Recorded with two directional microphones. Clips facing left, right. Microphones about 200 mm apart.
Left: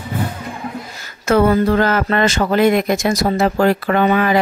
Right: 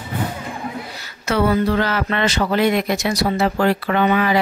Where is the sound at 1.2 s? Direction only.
50° left (ahead or behind).